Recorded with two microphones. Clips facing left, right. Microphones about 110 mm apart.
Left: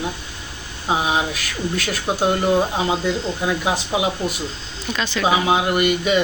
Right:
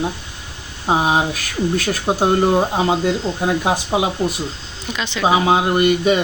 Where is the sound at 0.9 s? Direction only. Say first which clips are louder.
Right 4 dB; 40° right (ahead or behind).